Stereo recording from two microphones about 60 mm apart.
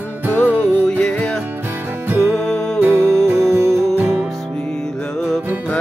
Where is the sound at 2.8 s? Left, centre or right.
Right.